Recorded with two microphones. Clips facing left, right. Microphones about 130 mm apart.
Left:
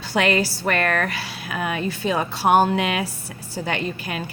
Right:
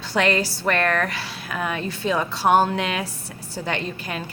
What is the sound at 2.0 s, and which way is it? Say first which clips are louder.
A woman's voice: even; 5° left (ahead or behind).